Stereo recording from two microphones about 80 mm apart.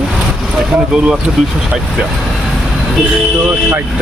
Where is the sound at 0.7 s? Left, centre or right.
Centre.